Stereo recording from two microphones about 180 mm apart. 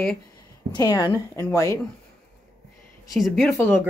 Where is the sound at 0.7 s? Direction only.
20° left (ahead or behind).